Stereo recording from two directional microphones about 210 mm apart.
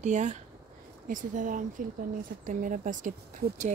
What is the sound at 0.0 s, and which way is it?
Speech, 35° right (ahead or behind).